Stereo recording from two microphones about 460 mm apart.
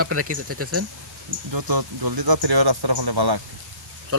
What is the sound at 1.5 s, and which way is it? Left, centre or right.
Speech, right.